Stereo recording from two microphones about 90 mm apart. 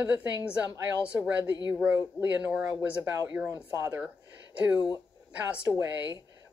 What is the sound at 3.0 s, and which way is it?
Speech, 30° right (ahead or behind).